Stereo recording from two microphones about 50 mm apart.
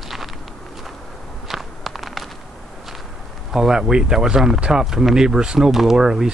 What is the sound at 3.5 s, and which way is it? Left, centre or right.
Speech, centre.